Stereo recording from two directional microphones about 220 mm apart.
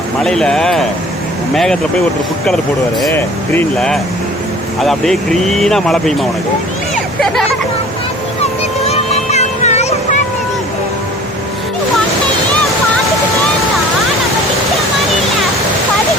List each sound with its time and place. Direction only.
0.2 s speech: 5° left (ahead or behind)
3.0 s speech: 10° left (ahead or behind)
8.8 s a sound: 30° left (ahead or behind)